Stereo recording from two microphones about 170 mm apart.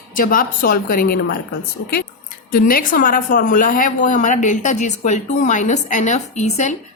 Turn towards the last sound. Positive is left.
turn(degrees=45)  # may be behind; listen again after turning